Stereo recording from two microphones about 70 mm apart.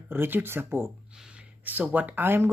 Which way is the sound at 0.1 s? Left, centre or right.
Right.